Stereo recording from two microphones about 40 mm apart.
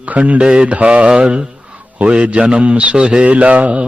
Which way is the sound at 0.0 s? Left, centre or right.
Right.